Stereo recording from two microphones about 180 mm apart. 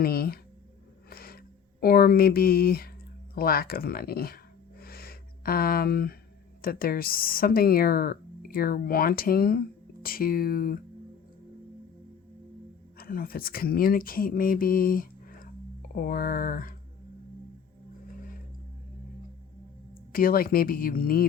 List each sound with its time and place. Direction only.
0.0 s speech: 60° left (ahead or behind)
1.1 s a sound: 55° left (ahead or behind)
1.8 s speech: 55° left (ahead or behind)
4.8 s a sound: 55° left (ahead or behind)
6.6 s speech: 55° left (ahead or behind)
13.0 s speech: 55° left (ahead or behind)
18.2 s music: 50° left (ahead or behind)
20.1 s speech: 55° left (ahead or behind)